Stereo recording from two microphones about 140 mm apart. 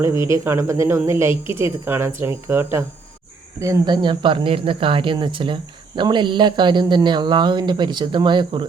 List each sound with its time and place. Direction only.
0.0 s speech: 20° right (ahead or behind)
3.6 s speech: 25° right (ahead or behind)